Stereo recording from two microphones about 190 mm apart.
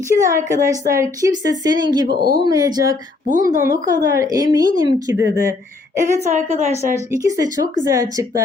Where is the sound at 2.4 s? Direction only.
20° right (ahead or behind).